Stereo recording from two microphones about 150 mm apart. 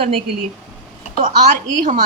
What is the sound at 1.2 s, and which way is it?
Speech, 60° right (ahead or behind).